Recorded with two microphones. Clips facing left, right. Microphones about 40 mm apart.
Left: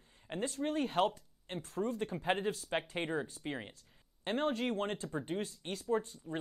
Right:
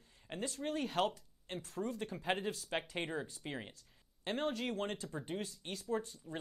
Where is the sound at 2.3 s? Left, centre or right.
Centre.